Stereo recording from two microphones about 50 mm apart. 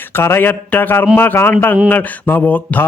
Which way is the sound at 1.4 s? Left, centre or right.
Left.